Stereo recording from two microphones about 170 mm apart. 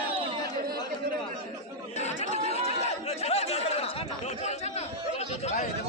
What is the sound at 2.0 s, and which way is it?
Chatter, 40° left (ahead or behind).